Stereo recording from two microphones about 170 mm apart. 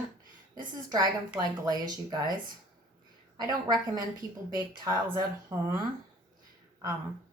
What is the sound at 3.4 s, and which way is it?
Speech, 25° right (ahead or behind).